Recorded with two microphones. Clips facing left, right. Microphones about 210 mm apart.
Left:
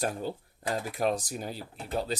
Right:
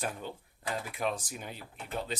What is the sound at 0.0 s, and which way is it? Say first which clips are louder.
Speech: left 6 dB; 40° left (ahead or behind).